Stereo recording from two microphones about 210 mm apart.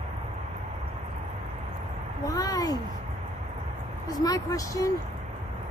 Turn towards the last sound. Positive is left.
turn(degrees=15)  # may be behind; listen again after turning